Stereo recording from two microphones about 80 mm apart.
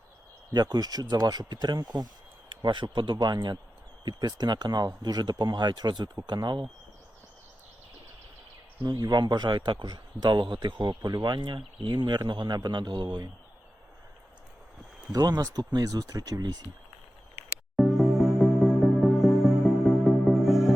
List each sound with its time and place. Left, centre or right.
0.5 s speech: right
2.5 s a man's voice: right
8.8 s a man's voice: right
15.1 s speech: right
17.7 s music: centre